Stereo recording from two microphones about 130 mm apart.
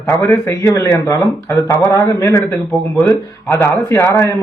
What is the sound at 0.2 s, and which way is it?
A man's voice, 25° left (ahead or behind).